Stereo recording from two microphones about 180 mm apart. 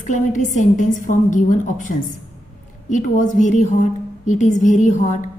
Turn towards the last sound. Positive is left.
turn(degrees=45)  # may be behind; listen again after turning